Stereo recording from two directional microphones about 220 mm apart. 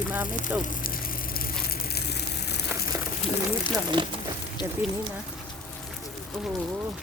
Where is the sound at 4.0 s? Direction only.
20° right (ahead or behind).